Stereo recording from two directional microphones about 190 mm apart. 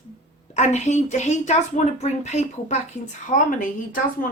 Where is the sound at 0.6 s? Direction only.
40° left (ahead or behind).